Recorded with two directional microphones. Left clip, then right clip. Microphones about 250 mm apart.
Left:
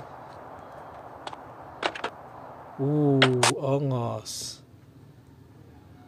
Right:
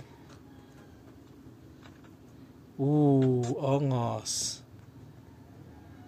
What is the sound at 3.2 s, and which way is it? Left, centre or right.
Speech, left.